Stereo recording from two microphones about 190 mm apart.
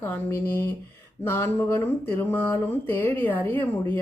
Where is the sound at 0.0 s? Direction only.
10° left (ahead or behind).